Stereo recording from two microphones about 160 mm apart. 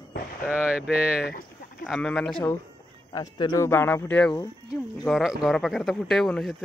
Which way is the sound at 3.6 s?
15° left (ahead or behind).